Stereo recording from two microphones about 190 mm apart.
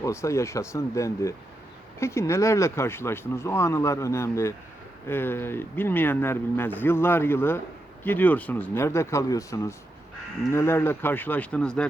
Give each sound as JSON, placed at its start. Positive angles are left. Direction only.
{"t": 0.0, "sound": "speech", "side_deg": 15}